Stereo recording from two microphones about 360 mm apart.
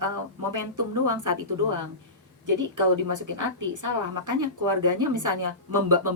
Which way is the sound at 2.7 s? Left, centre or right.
Right.